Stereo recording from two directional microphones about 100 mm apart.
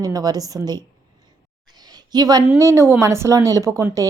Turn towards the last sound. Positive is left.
turn(degrees=-35)  # may be behind; listen again after turning